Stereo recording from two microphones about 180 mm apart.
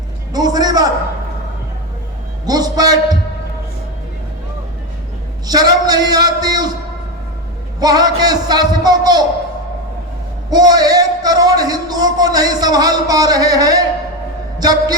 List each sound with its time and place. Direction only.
0.3 s a man's voice: 20° right (ahead or behind)
2.5 s a man's voice: 20° right (ahead or behind)
5.5 s a man's voice: 20° right (ahead or behind)
7.8 s a man's voice: 20° right (ahead or behind)
10.5 s a man's voice: 20° right (ahead or behind)